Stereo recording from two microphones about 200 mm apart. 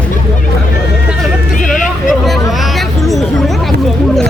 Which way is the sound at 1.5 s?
40° left (ahead or behind).